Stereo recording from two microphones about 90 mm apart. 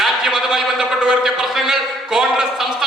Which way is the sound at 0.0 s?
5° right (ahead or behind).